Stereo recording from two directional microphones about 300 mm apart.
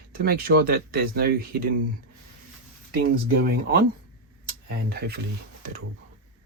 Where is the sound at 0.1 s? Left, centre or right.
Right.